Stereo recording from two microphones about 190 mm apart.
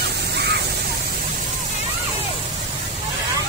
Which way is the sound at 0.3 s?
60° right (ahead or behind).